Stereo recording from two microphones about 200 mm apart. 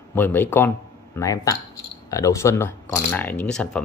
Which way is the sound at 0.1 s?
10° left (ahead or behind).